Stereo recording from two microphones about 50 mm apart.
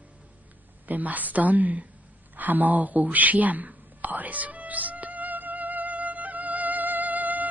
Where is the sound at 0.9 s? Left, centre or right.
Right.